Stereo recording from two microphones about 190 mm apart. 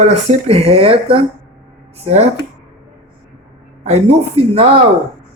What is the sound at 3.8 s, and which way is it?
Speech, 35° right (ahead or behind).